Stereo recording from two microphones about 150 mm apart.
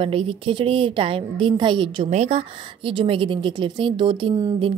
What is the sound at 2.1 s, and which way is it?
A woman's voice, 45° right (ahead or behind).